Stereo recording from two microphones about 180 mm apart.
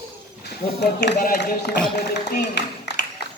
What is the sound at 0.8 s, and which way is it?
Speech, 70° left (ahead or behind).